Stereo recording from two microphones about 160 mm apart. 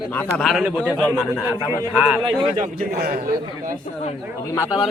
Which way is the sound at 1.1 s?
10° left (ahead or behind).